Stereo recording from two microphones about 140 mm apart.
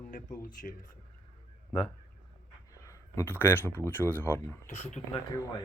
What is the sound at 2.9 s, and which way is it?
Speech, 20° left (ahead or behind).